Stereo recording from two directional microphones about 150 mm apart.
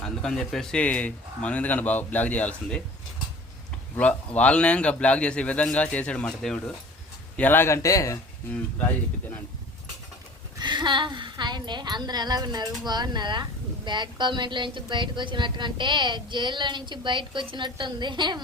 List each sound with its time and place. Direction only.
0.0 s speech: 5° left (ahead or behind)
3.9 s a man's voice: 10° left (ahead or behind)
10.6 s a woman's voice: 30° right (ahead or behind)